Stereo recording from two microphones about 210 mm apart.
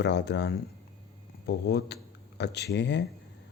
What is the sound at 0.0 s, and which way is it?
Speech, 55° left (ahead or behind).